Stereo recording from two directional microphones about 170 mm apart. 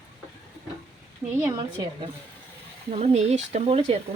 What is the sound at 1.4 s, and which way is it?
Speech, 25° right (ahead or behind).